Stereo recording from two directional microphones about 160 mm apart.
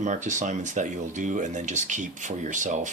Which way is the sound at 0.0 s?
50° right (ahead or behind).